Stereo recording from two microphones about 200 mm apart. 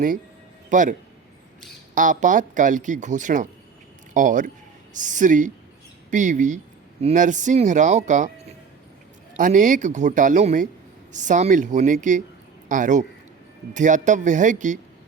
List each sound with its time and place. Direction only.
0.7 s speech: 40° right (ahead or behind)
2.0 s a man's voice: 40° right (ahead or behind)